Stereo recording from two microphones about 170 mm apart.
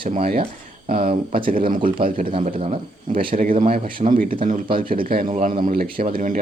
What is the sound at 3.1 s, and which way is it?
Speech, 55° right (ahead or behind).